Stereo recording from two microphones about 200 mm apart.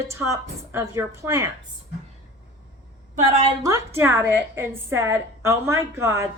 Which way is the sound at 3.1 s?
30° right (ahead or behind).